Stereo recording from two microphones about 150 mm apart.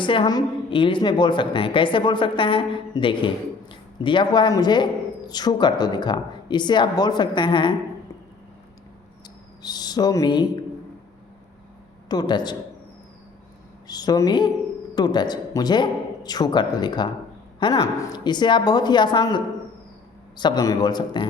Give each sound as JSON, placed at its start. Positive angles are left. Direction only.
{"t": 0.0, "sound": "a woman's voice", "side_deg": 35}
{"t": 9.6, "sound": "speech", "side_deg": 25}
{"t": 12.0, "sound": "speech", "side_deg": 30}
{"t": 13.8, "sound": "speech", "side_deg": 25}